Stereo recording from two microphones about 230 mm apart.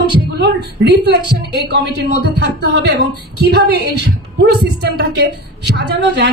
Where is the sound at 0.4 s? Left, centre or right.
Right.